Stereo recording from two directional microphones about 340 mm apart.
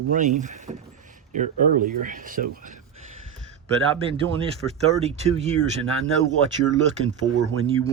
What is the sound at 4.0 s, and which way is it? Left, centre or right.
Speech, centre.